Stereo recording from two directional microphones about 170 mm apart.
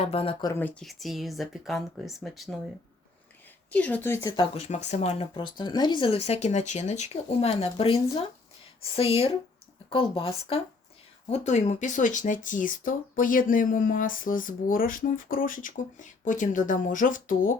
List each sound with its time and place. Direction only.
0.0 s speech: 35° left (ahead or behind)
0.6 s speech: centre (ahead or behind)
3.7 s speech: 10° left (ahead or behind)
4.5 s speech: 40° left (ahead or behind)